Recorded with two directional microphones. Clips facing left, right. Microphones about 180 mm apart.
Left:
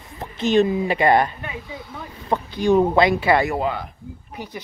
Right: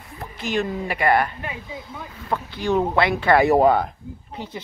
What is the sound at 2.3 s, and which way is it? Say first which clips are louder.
Speech: left 4 dB; 15° left (ahead or behind).